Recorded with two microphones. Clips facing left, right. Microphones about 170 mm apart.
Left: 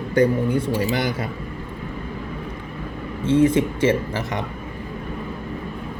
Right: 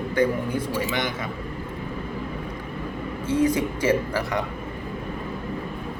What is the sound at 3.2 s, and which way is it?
Speech, 25° left (ahead or behind).